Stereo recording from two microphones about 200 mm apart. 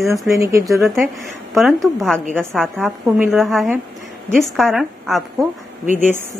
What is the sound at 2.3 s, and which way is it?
Speech, centre (ahead or behind).